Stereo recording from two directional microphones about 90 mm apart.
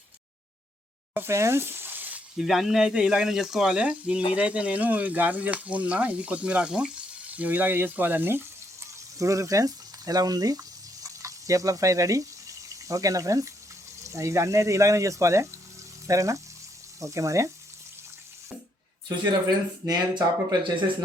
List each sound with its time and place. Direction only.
1.1 s sizzle: 30° right (ahead or behind)
2.4 s speech: 5° right (ahead or behind); by 8.4 s 25° right (ahead or behind)
9.1 s speech: 35° right (ahead or behind)
19.9 s speech: 45° right (ahead or behind)